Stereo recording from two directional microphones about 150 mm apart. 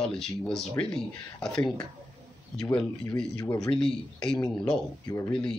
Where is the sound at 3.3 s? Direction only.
25° left (ahead or behind).